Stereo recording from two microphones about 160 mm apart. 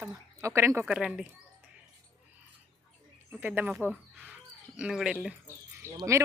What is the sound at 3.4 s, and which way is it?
Speech, 10° right (ahead or behind).